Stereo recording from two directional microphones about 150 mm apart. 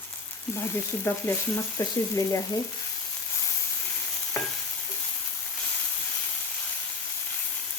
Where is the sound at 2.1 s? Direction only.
20° left (ahead or behind).